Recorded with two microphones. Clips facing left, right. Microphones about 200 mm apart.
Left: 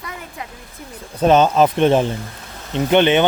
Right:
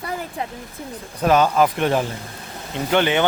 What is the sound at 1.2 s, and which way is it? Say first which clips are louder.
Speech: left 3 dB; 25° left (ahead or behind).